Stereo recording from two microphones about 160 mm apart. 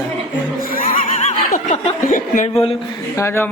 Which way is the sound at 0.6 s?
60° left (ahead or behind).